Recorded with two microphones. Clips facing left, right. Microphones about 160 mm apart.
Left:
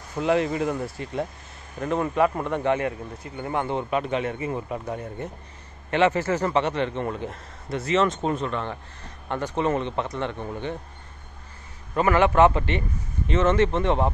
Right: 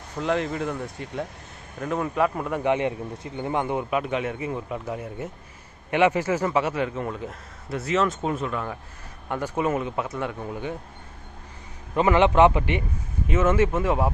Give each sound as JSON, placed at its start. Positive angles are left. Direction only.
{"t": 0.2, "sound": "a man's voice", "side_deg": 5}
{"t": 2.6, "sound": "a man's voice", "side_deg": -20}
{"t": 11.9, "sound": "a man's voice", "side_deg": -20}